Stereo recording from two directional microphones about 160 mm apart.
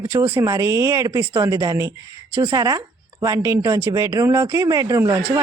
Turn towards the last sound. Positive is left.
turn(degrees=-15)  # may be behind; listen again after turning